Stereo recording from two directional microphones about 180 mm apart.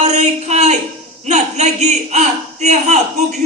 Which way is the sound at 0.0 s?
40° right (ahead or behind).